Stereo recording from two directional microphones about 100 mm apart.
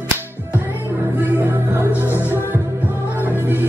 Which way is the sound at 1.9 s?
25° left (ahead or behind).